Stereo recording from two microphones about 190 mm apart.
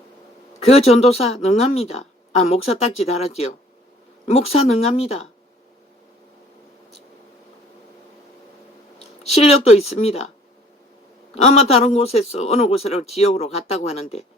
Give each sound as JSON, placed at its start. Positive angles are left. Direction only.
{"t": 0.6, "sound": "speech", "side_deg": 35}
{"t": 9.0, "sound": "speech", "side_deg": 30}
{"t": 11.4, "sound": "speech", "side_deg": 35}